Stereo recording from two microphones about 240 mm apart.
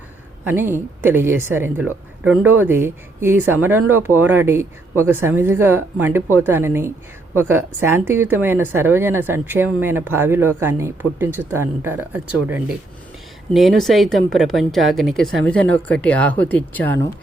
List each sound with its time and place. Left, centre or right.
0.4 s a woman's voice: centre